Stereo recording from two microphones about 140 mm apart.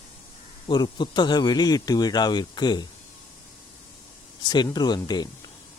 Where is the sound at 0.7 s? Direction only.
30° left (ahead or behind).